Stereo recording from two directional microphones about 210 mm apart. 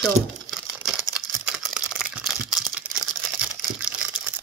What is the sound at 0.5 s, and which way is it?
Crumpling, centre (ahead or behind).